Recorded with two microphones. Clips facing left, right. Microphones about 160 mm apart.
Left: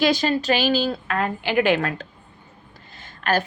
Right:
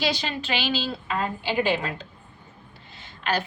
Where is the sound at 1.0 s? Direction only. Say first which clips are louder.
Left 3 dB; 65° left (ahead or behind).